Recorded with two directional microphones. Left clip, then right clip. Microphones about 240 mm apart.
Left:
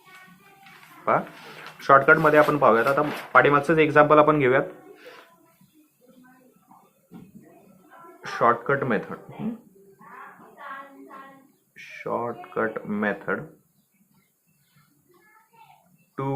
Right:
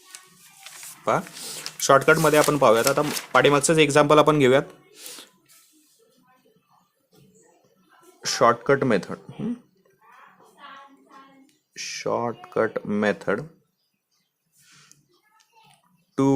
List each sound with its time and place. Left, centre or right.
1.0 s speech: right
8.2 s speech: right
11.7 s speech: right